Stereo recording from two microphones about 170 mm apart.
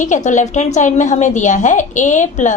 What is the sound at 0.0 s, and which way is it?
A woman's voice, 45° left (ahead or behind).